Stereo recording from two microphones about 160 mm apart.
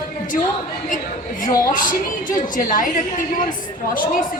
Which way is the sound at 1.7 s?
55° left (ahead or behind).